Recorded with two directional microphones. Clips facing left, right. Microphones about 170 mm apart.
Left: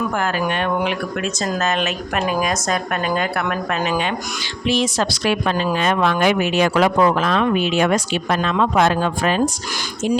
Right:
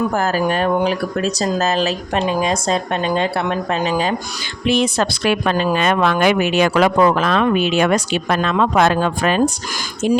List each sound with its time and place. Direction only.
0.2 s speech: 40° right (ahead or behind)
4.6 s a woman's voice: 60° right (ahead or behind)